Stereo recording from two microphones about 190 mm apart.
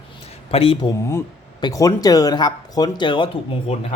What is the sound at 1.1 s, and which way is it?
Speech, 15° left (ahead or behind).